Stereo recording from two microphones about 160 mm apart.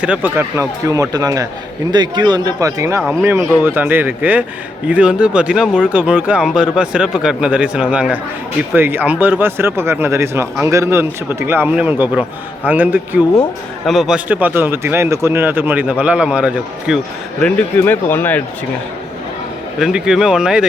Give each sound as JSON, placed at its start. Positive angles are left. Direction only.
{"t": 0.0, "sound": "a man's voice", "side_deg": -10}
{"t": 17.4, "sound": "a man's voice", "side_deg": 15}
{"t": 19.8, "sound": "speech", "side_deg": -5}